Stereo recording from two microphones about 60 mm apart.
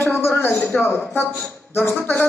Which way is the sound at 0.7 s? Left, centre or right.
Centre.